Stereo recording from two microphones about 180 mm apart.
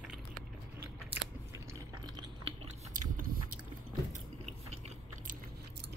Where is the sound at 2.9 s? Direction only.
50° right (ahead or behind).